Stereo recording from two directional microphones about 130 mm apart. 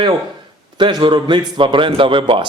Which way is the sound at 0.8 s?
35° right (ahead or behind).